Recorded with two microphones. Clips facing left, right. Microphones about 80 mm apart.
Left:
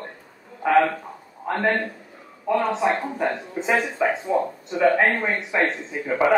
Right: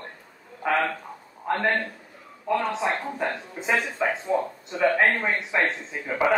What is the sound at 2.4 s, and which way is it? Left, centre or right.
Speech, centre.